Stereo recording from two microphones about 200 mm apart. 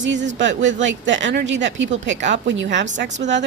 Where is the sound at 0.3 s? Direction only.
65° right (ahead or behind).